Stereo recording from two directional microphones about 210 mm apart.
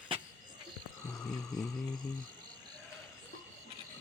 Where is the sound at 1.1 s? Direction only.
Centre (ahead or behind).